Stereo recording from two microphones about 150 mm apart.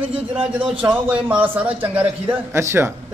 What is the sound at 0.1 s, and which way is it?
A man's voice, 10° right (ahead or behind).